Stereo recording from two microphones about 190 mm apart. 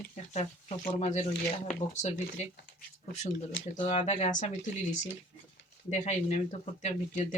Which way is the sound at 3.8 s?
35° left (ahead or behind).